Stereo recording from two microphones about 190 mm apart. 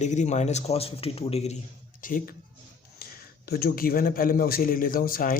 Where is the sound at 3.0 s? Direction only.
55° left (ahead or behind).